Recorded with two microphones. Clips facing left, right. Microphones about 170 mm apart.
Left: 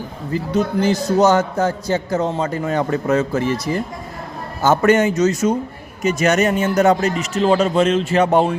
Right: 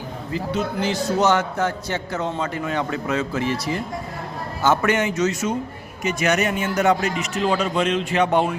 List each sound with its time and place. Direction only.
0.5 s a man's voice: 40° left (ahead or behind)